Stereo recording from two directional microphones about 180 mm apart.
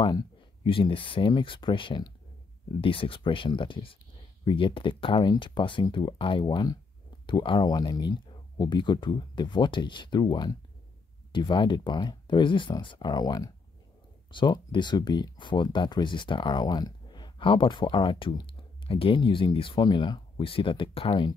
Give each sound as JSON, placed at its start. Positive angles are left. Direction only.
{"t": 0.0, "sound": "speech", "side_deg": 25}